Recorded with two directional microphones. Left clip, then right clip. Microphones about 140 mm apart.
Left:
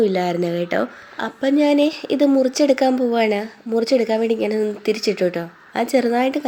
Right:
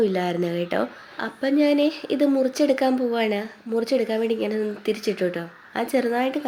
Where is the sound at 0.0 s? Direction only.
15° left (ahead or behind).